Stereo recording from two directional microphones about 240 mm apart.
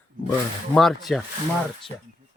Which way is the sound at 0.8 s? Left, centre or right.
Centre.